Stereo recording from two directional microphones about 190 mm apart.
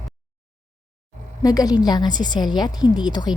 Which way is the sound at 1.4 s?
20° left (ahead or behind).